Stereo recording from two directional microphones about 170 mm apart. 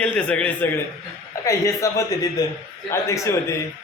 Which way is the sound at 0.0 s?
5° left (ahead or behind).